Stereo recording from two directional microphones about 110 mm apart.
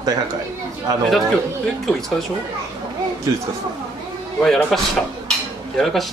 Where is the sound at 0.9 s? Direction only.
35° right (ahead or behind).